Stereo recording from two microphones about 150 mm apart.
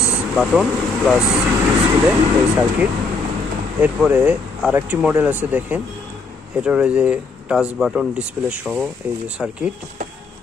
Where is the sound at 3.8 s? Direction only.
10° right (ahead or behind).